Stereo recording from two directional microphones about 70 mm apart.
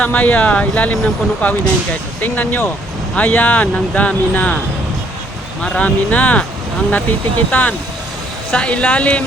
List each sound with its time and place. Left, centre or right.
0.0 s speech: left
5.6 s speech: centre